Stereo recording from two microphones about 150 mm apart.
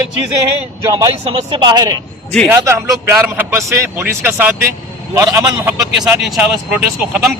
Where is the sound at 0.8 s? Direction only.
20° right (ahead or behind).